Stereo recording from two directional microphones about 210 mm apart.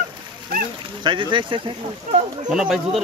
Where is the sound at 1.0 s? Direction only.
25° right (ahead or behind).